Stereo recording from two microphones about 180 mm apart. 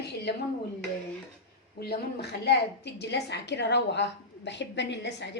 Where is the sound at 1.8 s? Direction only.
60° left (ahead or behind).